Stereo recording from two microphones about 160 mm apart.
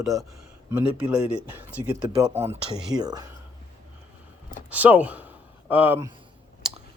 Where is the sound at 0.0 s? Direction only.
20° right (ahead or behind).